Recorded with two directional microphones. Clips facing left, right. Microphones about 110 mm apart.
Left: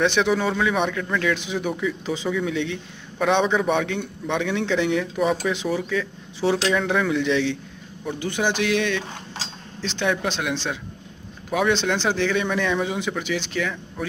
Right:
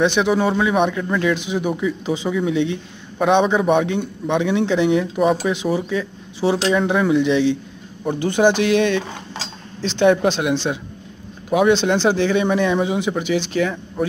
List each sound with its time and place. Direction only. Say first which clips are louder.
0.0 s speech: right 3 dB; 10° right (ahead or behind)
8.0 s speech: right 8 dB; 40° right (ahead or behind)
10.2 s speech: right 7 dB; 20° right (ahead or behind)
13.6 s speech: right 6 dB; 35° right (ahead or behind)